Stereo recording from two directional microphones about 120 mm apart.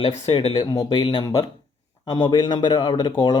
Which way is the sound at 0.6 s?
30° left (ahead or behind).